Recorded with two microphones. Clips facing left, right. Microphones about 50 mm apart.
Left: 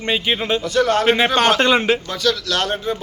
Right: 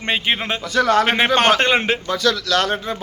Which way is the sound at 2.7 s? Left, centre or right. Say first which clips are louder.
Left 2 dB; right.